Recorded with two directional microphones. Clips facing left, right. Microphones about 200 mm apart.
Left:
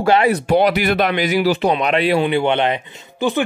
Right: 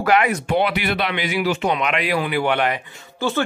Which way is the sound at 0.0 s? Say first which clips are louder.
Left 3 dB; 30° left (ahead or behind).